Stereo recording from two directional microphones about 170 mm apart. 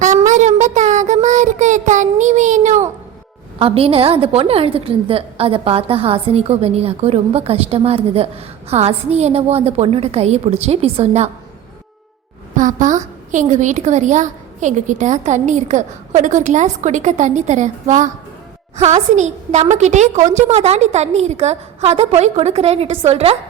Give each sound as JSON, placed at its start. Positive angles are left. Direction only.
{"t": 0.0, "sound": "child singing", "side_deg": -45}
{"t": 3.6, "sound": "a woman's voice", "side_deg": -35}
{"t": 12.5, "sound": "a woman's voice", "side_deg": -50}